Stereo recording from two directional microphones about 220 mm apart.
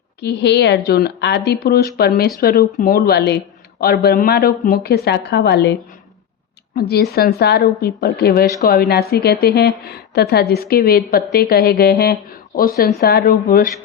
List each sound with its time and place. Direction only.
0.2 s a woman's voice: 50° left (ahead or behind)
6.7 s a woman's voice: 45° left (ahead or behind)